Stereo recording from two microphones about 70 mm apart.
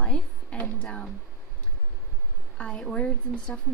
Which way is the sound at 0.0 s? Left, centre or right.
Centre.